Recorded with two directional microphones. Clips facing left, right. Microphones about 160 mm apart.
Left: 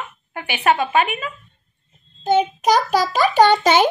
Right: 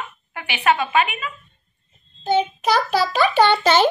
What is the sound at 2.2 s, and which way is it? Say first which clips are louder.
Child singing: left 2 dB; 45° left (ahead or behind).